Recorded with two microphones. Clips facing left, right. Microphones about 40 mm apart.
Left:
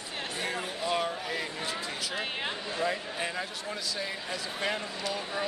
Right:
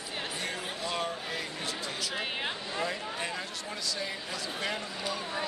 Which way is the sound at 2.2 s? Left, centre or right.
Centre.